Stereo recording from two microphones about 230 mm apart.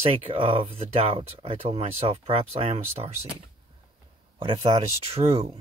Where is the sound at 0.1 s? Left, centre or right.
Right.